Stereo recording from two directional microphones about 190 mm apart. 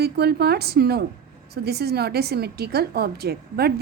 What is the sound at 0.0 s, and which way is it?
A woman's voice, 60° right (ahead or behind).